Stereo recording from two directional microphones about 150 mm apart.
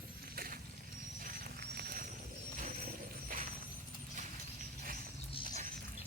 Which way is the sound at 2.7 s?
65° right (ahead or behind).